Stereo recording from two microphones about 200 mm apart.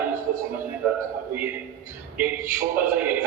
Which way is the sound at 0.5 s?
10° right (ahead or behind).